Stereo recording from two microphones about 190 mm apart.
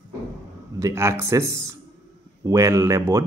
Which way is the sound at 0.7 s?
15° right (ahead or behind).